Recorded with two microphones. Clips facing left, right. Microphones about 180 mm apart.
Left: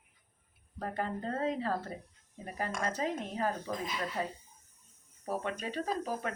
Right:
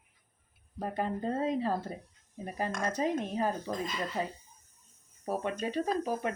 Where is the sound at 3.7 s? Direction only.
5° left (ahead or behind).